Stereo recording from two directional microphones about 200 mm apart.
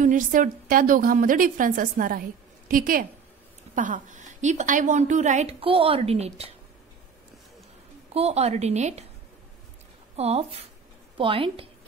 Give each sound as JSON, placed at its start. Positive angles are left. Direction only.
{"t": 0.0, "sound": "a woman's voice", "side_deg": -40}
{"t": 8.1, "sound": "a woman's voice", "side_deg": -30}
{"t": 10.1, "sound": "a woman's voice", "side_deg": -30}